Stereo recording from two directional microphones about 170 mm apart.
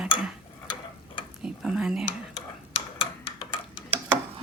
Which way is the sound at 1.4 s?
5° right (ahead or behind).